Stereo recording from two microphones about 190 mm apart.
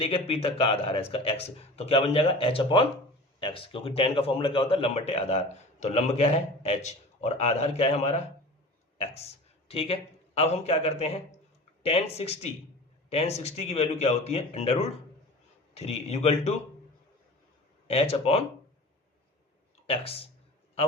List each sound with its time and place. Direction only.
0.0 s a man's voice: 30° left (ahead or behind)
17.8 s a man's voice: 30° left (ahead or behind)
19.9 s a man's voice: 30° left (ahead or behind)